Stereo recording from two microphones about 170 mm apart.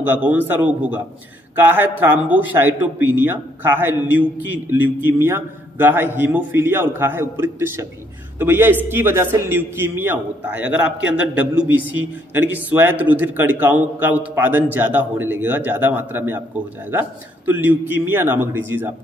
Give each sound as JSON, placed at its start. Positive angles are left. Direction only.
{"t": 0.0, "sound": "a man's voice", "side_deg": -10}